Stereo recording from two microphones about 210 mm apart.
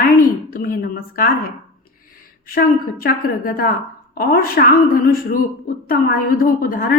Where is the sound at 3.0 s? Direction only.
45° left (ahead or behind).